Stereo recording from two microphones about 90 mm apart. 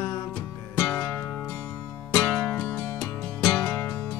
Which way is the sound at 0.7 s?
20° left (ahead or behind).